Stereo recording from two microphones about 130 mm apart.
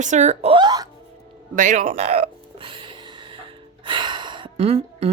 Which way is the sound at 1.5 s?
75° right (ahead or behind).